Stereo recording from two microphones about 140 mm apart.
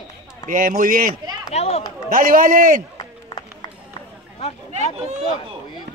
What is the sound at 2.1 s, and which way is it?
Speech, 80° right.